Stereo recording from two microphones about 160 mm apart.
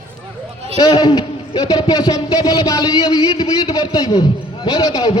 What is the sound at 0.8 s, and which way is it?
A man's voice, 25° left (ahead or behind).